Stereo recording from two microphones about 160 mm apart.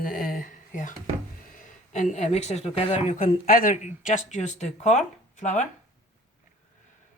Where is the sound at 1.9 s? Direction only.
50° left (ahead or behind).